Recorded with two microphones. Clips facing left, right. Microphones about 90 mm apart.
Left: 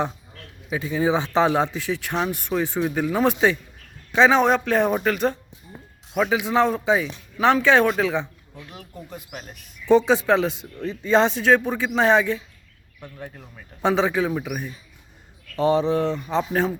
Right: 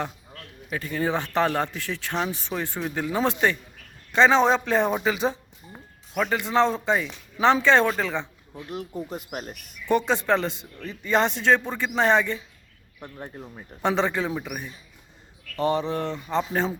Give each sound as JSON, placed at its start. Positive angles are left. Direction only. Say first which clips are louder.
{"t": 0.7, "sound": "a man's voice", "louder": "left 4 dB", "side_deg": 5}
{"t": 8.5, "sound": "speech", "louder": "right 7 dB", "side_deg": -25}
{"t": 10.1, "sound": "speech", "louder": "left 4 dB", "side_deg": 10}
{"t": 13.0, "sound": "speech", "louder": "even", "side_deg": -30}
{"t": 13.8, "sound": "speech", "louder": "left 3 dB", "side_deg": 10}
{"t": 15.5, "sound": "speech", "louder": "left 5 dB", "side_deg": 20}